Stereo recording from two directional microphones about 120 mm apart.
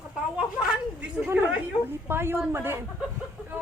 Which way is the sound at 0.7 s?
5° right (ahead or behind).